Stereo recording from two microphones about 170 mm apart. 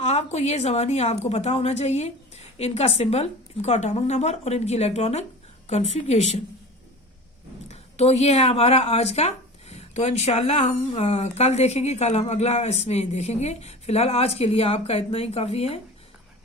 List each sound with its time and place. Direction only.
0.0 s speech: 40° left (ahead or behind)
7.7 s speech: 40° left (ahead or behind)